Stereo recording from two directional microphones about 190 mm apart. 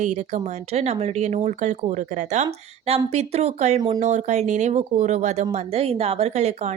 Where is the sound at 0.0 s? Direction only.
35° right (ahead or behind).